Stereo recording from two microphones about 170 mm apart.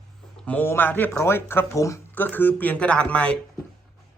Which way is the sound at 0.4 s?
10° left (ahead or behind).